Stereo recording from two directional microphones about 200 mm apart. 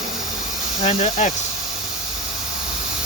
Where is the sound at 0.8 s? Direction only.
35° left (ahead or behind).